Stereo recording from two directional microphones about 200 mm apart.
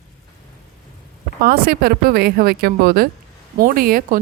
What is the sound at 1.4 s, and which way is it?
Speech, 50° right (ahead or behind).